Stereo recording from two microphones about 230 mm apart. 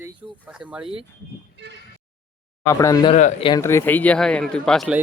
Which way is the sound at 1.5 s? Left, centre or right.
Right.